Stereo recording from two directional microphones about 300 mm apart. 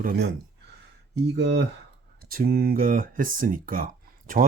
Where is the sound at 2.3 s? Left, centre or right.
Right.